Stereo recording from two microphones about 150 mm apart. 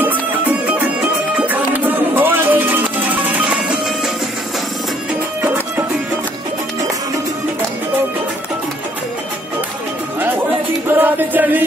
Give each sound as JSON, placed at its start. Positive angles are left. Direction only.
{"t": 0.0, "sound": "music", "side_deg": -10}
{"t": 5.4, "sound": "music", "side_deg": -15}
{"t": 10.9, "sound": "music", "side_deg": -15}